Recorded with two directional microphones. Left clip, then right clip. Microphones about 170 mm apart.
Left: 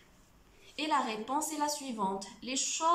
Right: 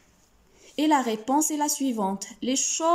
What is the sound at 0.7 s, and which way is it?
A woman's voice, 45° right (ahead or behind).